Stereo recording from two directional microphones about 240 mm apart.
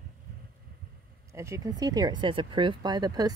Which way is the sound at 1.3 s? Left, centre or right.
Centre.